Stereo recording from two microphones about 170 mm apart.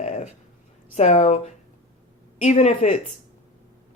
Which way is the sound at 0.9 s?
40° left (ahead or behind).